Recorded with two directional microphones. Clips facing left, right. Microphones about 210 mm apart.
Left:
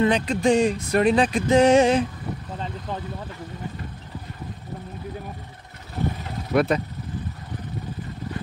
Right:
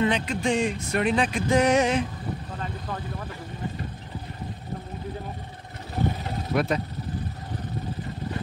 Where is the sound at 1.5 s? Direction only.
30° left (ahead or behind).